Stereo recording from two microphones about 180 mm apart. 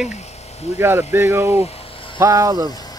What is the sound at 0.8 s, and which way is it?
Speech, 15° right (ahead or behind).